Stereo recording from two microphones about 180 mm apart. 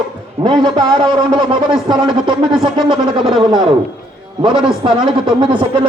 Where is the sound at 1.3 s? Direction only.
25° right (ahead or behind).